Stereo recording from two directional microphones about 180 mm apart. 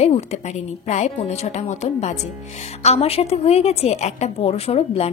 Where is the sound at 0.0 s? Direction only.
40° left (ahead or behind).